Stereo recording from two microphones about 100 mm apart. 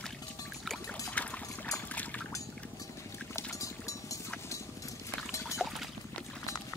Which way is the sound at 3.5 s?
35° left (ahead or behind).